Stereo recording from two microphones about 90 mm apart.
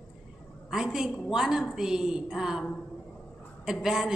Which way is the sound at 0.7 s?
5° right (ahead or behind).